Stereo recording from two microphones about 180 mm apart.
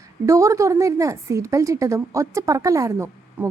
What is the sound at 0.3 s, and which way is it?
A woman's voice, 20° right (ahead or behind).